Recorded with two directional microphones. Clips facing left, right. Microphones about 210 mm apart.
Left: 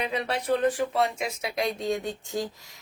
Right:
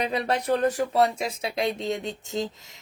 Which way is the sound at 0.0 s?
40° right (ahead or behind).